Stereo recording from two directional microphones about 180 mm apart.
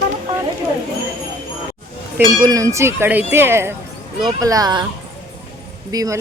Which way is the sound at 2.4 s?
20° right (ahead or behind).